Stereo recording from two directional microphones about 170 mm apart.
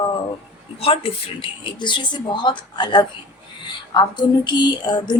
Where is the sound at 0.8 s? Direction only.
35° left (ahead or behind).